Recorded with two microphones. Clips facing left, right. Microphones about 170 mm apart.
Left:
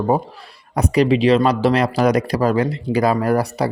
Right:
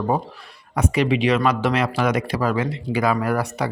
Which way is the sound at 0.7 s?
35° left (ahead or behind).